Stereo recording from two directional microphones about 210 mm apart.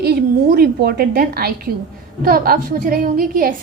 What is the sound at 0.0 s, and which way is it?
A woman's voice, 50° right (ahead or behind).